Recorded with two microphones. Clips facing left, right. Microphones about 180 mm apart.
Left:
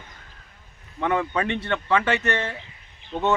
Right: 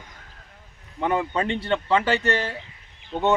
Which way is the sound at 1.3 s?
25° right (ahead or behind).